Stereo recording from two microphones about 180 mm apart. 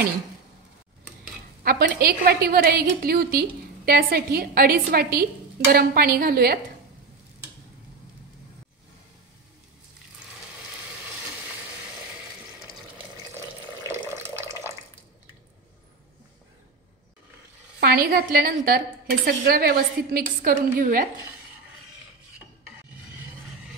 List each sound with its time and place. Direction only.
1.6 s a woman's voice: 55° right (ahead or behind)
13.8 s water: 15° right (ahead or behind)
17.7 s a woman's voice: 60° right (ahead or behind)